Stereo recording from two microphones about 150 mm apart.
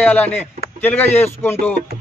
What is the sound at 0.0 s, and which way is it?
Speech, 10° left (ahead or behind).